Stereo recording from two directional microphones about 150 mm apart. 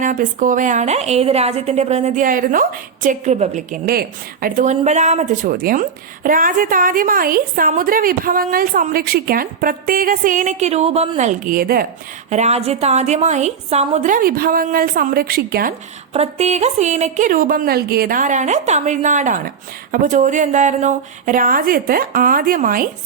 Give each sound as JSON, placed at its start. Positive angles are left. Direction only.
{"t": 0.0, "sound": "a woman's voice", "side_deg": -60}
{"t": 3.8, "sound": "a woman's voice", "side_deg": -80}
{"t": 6.2, "sound": "a woman's voice", "side_deg": -65}
{"t": 12.3, "sound": "a woman's voice", "side_deg": -50}
{"t": 16.1, "sound": "a woman's voice", "side_deg": -45}